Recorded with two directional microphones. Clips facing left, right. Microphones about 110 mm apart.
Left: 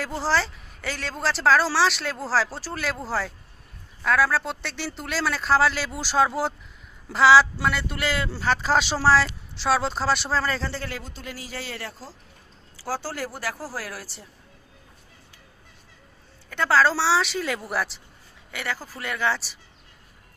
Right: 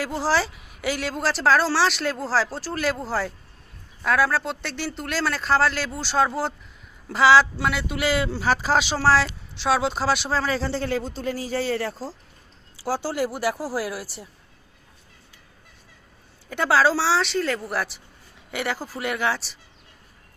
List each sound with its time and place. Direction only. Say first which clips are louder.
0.0 s a woman's voice: right 2 dB; 5° right (ahead or behind)
10.7 s a man's voice: right 8 dB; 25° right (ahead or behind)
12.7 s speech: right 5 dB; 15° right (ahead or behind)
16.5 s a woman's voice: right 1 dB; 15° right (ahead or behind)
18.5 s speech: right 4 dB; 20° right (ahead or behind)
19.3 s a woman's voice: even; 5° left (ahead or behind)